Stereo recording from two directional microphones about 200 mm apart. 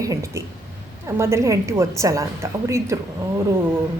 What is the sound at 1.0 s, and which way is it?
A woman's voice, 15° right (ahead or behind).